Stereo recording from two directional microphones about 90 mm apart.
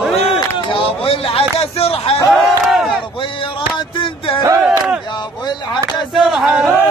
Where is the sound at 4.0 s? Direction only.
70° left (ahead or behind).